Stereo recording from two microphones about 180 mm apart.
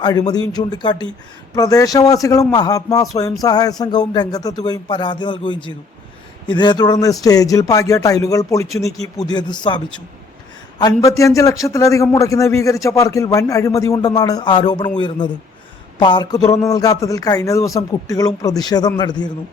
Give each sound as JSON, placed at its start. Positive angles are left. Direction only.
{"t": 0.0, "sound": "a man's voice", "side_deg": 20}